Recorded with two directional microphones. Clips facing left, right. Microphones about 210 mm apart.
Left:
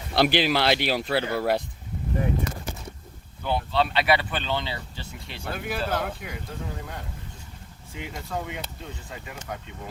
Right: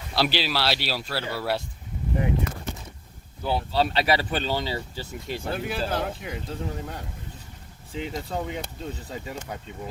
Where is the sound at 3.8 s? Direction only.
40° right (ahead or behind).